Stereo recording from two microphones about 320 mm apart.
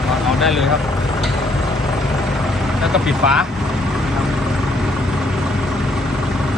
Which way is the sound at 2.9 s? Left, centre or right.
Centre.